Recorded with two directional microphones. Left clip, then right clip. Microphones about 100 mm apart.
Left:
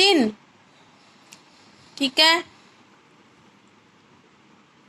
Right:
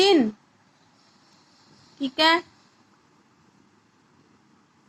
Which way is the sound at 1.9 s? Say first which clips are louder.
Left 3 dB; 30° left (ahead or behind).